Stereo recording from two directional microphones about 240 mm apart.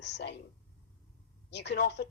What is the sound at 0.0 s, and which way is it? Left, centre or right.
Speech, left.